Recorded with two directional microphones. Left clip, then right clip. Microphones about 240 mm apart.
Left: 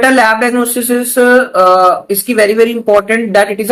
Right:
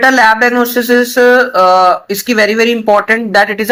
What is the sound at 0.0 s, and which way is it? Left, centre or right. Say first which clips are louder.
Speech: right 1 dB; right.